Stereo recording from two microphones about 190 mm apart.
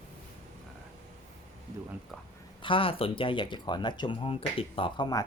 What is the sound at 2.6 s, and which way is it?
Speech, 25° left (ahead or behind).